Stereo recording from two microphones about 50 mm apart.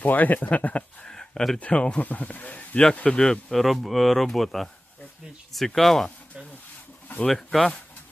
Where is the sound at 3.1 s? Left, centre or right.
Centre.